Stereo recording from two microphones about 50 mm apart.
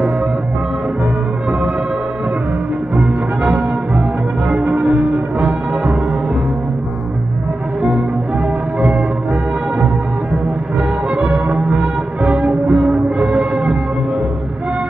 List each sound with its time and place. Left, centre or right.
3.0 s music: centre
4.5 s music: centre
11.1 s brass instrument: right
11.8 s music: right
12.4 s music: centre
13.2 s music: centre